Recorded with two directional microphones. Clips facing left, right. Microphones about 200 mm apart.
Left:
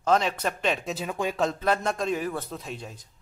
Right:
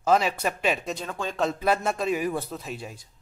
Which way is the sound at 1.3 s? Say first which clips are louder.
Right 3 dB; 5° right (ahead or behind).